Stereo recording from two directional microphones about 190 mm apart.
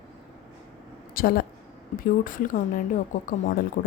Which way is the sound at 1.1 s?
50° left (ahead or behind).